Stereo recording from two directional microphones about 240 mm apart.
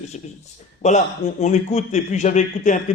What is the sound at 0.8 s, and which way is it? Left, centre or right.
A man's voice, left.